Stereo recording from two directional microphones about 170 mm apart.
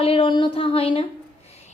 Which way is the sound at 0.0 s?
35° left (ahead or behind).